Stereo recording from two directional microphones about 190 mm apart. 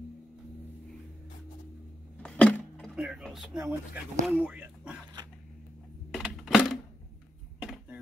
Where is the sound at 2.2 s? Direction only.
5° left (ahead or behind).